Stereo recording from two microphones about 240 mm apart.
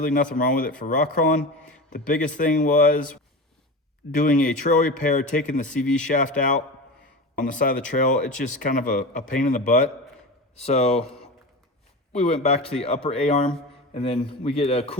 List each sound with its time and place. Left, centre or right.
0.0 s speech: left
4.1 s a man's voice: left
12.1 s a man's voice: left